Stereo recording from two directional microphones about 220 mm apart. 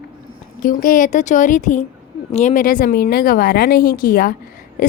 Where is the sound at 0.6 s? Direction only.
40° left (ahead or behind).